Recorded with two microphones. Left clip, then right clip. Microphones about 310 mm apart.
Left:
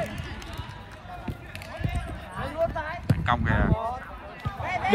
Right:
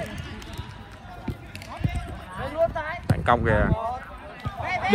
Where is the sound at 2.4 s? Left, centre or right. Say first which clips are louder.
Right 3 dB; centre.